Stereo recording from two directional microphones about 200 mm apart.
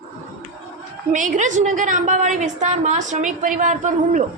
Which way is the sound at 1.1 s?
40° right (ahead or behind).